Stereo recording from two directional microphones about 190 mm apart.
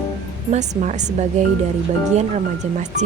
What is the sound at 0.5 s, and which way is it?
Speech, 40° right (ahead or behind).